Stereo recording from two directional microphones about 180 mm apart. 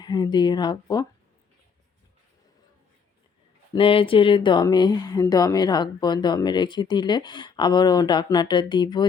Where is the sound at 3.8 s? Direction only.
30° left (ahead or behind).